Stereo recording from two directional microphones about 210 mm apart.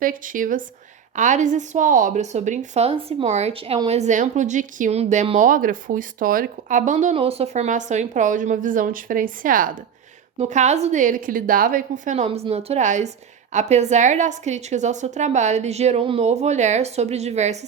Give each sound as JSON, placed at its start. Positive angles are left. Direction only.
{"t": 0.0, "sound": "a woman's voice", "side_deg": -40}